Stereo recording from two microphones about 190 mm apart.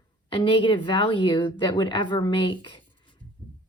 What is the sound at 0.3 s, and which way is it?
Speech, 25° left (ahead or behind).